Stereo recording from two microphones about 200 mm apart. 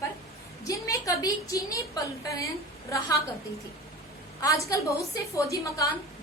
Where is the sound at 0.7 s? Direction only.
15° left (ahead or behind).